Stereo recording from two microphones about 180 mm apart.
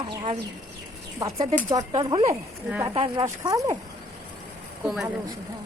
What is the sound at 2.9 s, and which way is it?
Speech, 30° right (ahead or behind).